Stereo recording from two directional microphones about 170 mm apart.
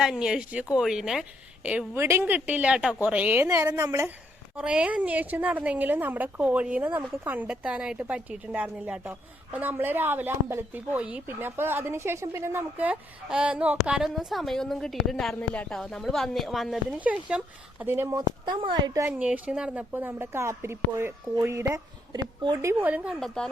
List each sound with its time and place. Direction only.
0.0 s speech: 5° right (ahead or behind)
4.5 s speech: 5° right (ahead or behind); by 19.0 s 30° right (ahead or behind)
19.0 s speech: 10° right (ahead or behind)
23.2 s speech: 5° left (ahead or behind)